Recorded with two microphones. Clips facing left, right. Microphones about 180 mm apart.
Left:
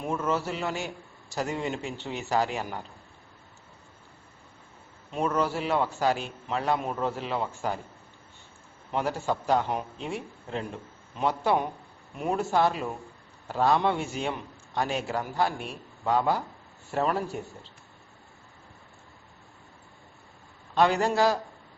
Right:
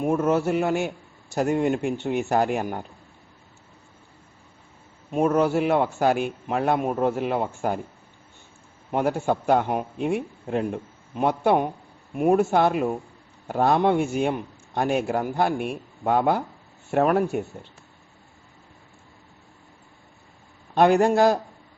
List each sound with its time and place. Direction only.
0.0 s a man's voice: 50° right (ahead or behind)
5.1 s a man's voice: 55° right (ahead or behind)
8.9 s a man's voice: 50° right (ahead or behind)
20.7 s a man's voice: 50° right (ahead or behind)